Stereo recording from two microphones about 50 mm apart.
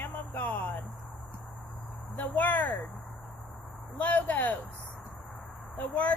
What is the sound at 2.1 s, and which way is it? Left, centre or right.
Speech, left.